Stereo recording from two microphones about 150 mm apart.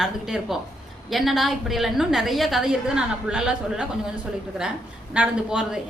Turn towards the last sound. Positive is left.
turn(degrees=-5)  # may be behind; listen again after turning